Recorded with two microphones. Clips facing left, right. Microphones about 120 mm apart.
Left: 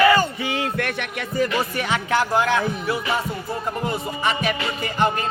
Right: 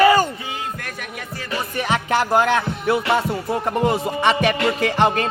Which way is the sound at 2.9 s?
75° right (ahead or behind).